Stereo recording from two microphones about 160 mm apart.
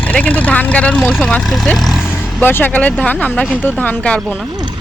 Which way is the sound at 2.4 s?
10° left (ahead or behind).